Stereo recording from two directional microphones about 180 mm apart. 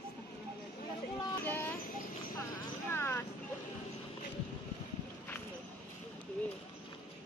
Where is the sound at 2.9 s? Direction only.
15° left (ahead or behind).